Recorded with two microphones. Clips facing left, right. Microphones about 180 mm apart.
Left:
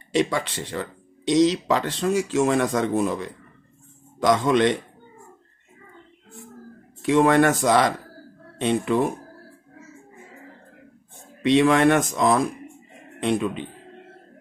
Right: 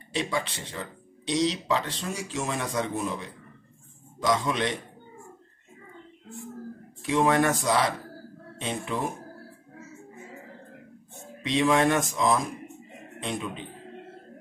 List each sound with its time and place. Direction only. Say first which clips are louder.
0.1 s speech: left 7 dB; 65° left (ahead or behind)
7.1 s a man's voice: left 6 dB; 65° left (ahead or behind)
11.4 s a man's voice: left 6 dB; 65° left (ahead or behind)